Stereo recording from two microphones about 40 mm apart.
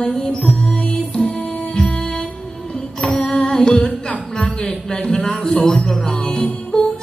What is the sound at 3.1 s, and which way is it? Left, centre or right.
Music, left.